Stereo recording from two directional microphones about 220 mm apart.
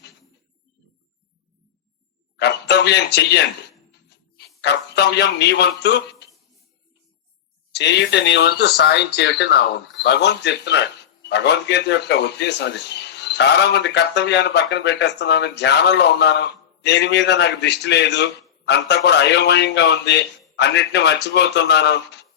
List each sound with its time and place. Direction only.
2.3 s a sound: 50° left (ahead or behind)
4.4 s a man's voice: 50° left (ahead or behind)
7.7 s a man's voice: 50° left (ahead or behind)